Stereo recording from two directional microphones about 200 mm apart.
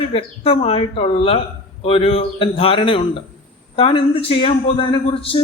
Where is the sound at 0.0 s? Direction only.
30° left (ahead or behind).